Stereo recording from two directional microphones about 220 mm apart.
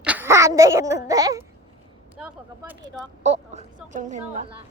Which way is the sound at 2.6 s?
15° right (ahead or behind).